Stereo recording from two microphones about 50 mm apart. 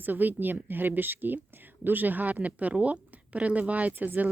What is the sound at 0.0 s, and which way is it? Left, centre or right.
Speech, right.